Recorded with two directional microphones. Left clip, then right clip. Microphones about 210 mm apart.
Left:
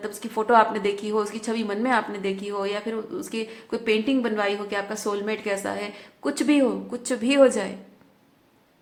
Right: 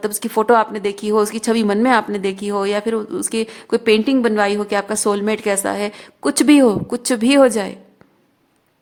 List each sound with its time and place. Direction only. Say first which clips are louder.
0.0 s a woman's voice: right 9 dB; 55° right (ahead or behind)